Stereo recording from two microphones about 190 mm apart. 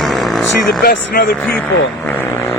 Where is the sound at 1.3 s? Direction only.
10° left (ahead or behind).